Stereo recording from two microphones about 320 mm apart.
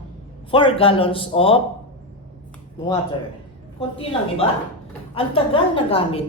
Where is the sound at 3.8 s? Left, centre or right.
Centre.